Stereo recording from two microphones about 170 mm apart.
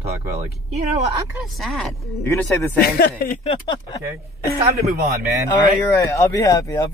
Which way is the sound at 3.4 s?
35° left (ahead or behind).